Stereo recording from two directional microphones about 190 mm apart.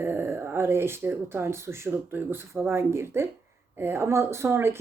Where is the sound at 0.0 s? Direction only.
10° right (ahead or behind).